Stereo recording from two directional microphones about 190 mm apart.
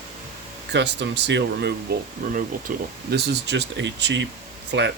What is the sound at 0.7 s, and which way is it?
Speech, 65° right (ahead or behind).